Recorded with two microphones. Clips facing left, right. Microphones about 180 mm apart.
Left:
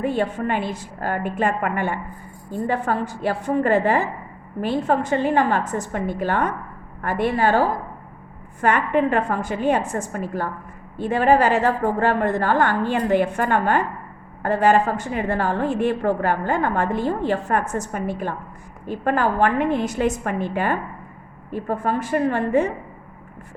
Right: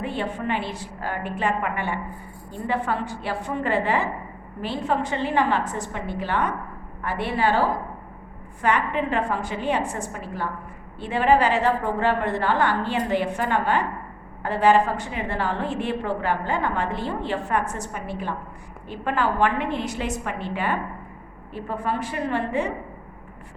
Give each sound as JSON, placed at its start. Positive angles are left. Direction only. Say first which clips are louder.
{"t": 0.0, "sound": "a woman's voice", "louder": "left 5 dB", "side_deg": 45}